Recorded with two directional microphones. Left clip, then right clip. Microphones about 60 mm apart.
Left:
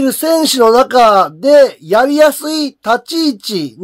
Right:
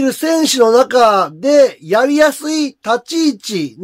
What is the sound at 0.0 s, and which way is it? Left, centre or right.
Speech, left.